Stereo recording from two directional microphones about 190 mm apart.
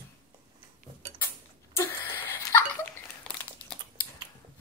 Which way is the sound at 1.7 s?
10° left (ahead or behind).